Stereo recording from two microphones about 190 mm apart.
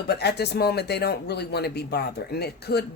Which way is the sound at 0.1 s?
60° left (ahead or behind).